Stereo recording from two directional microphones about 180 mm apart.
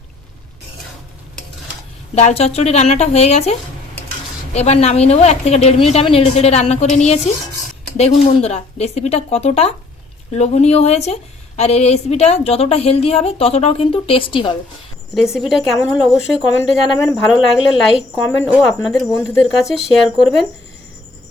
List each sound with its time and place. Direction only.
2.1 s a woman's voice: 35° left (ahead or behind)
4.5 s a woman's voice: 35° left (ahead or behind)
15.1 s speech: centre (ahead or behind)